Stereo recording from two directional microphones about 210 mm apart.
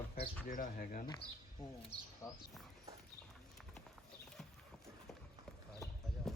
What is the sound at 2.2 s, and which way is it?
Speech, 10° left (ahead or behind).